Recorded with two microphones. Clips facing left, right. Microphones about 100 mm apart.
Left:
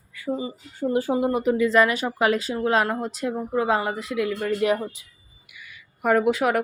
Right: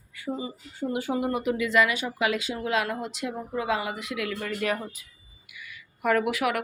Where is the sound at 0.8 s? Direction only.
40° left (ahead or behind).